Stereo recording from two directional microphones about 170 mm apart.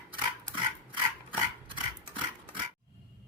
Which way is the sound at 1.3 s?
30° right (ahead or behind).